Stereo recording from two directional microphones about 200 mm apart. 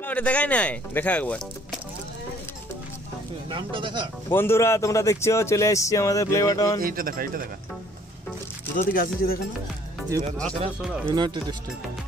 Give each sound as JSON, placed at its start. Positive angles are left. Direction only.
{"t": 0.0, "sound": "speech", "side_deg": 5}
{"t": 3.4, "sound": "speech", "side_deg": -25}
{"t": 4.3, "sound": "speech", "side_deg": 10}
{"t": 6.8, "sound": "speech", "side_deg": -45}
{"t": 8.7, "sound": "speech", "side_deg": 45}
{"t": 11.1, "sound": "speech", "side_deg": -20}